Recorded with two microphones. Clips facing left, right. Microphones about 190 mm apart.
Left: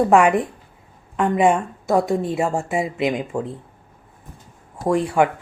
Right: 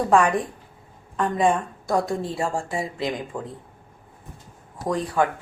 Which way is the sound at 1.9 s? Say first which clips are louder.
Left 5 dB; 20° left (ahead or behind).